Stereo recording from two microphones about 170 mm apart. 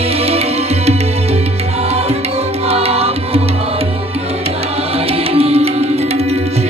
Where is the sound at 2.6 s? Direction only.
35° right (ahead or behind).